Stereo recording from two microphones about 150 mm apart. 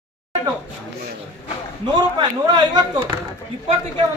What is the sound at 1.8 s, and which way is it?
A man's voice, 30° right (ahead or behind).